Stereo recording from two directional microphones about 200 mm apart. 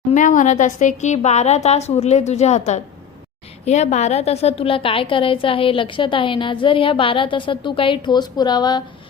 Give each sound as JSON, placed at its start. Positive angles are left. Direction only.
{"t": 0.1, "sound": "a woman's voice", "side_deg": 40}